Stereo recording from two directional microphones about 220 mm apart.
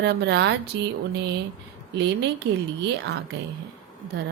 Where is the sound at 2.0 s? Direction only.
50° right (ahead or behind).